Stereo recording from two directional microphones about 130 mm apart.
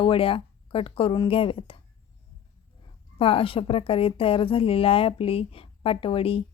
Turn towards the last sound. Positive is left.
turn(degrees=45)  # may be behind; listen again after turning